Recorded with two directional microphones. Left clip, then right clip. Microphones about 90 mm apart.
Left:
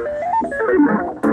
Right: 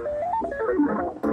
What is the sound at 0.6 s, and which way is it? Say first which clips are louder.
Music: left 8 dB; 30° left (ahead or behind).